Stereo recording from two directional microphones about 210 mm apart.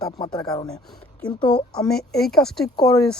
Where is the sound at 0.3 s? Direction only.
20° left (ahead or behind).